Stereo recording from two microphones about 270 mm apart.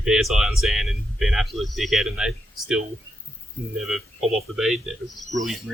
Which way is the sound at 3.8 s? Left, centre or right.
Centre.